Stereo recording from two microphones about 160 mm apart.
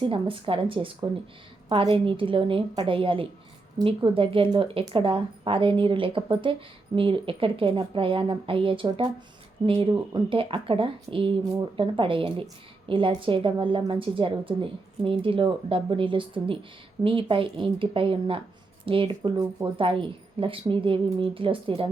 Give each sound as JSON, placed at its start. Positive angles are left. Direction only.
{"t": 0.0, "sound": "speech", "side_deg": -35}